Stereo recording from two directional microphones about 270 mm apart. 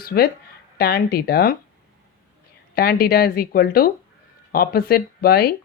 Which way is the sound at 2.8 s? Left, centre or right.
Left.